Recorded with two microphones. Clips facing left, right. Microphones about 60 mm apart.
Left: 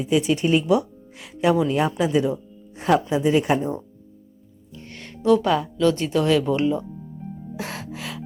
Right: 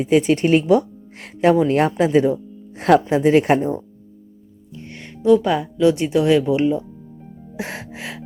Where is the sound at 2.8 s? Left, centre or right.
Right.